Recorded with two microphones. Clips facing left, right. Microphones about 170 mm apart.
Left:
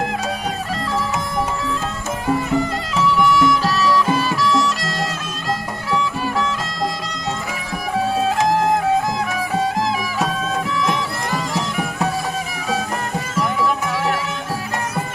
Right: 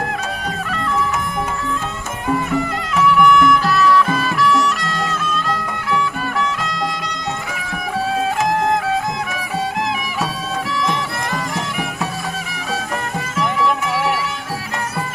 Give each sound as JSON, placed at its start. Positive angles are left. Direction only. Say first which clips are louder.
{"t": 2.9, "sound": "music", "louder": "right 4 dB", "side_deg": 35}